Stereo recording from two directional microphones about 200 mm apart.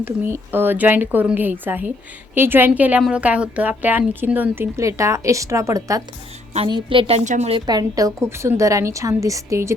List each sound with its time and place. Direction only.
0.0 s a woman's voice: 10° right (ahead or behind); by 7.6 s 35° right (ahead or behind)
7.7 s a woman's voice: 20° right (ahead or behind)